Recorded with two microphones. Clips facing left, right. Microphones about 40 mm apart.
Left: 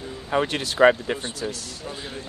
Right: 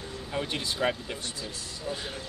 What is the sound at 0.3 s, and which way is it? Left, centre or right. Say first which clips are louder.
Speech: left 8 dB; left.